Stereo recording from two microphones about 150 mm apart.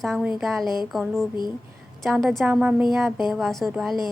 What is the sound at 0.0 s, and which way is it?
A woman's voice, centre (ahead or behind).